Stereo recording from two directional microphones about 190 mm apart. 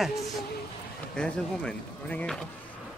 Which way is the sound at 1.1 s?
5° left (ahead or behind).